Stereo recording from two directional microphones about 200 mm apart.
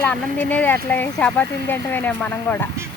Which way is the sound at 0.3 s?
10° left (ahead or behind).